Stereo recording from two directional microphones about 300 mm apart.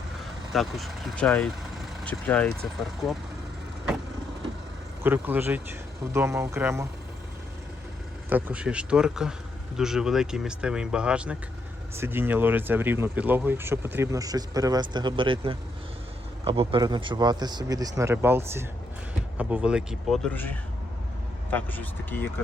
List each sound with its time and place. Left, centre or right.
0.5 s speech: centre
5.0 s speech: centre
8.3 s speech: centre
21.5 s speech: centre